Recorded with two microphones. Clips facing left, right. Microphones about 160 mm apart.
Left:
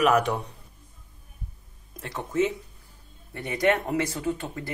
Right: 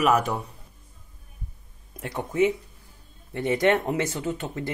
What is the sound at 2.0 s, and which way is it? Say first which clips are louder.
Speech: right 2 dB; 15° right (ahead or behind).